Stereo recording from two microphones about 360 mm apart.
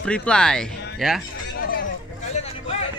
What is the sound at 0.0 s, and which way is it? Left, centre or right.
Speech, centre.